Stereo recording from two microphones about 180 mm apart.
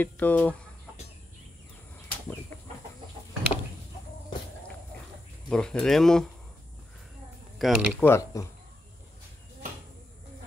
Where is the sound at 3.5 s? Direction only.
35° left (ahead or behind).